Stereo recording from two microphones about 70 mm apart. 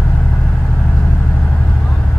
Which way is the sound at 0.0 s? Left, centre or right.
Left.